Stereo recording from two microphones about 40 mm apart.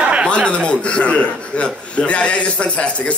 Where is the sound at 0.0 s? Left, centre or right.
Right.